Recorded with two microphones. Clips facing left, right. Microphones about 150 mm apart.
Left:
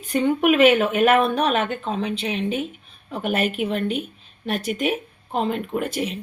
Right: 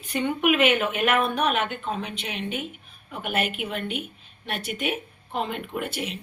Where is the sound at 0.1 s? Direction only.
40° left (ahead or behind).